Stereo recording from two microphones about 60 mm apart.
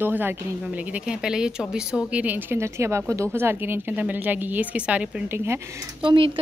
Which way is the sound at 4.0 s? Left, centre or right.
Right.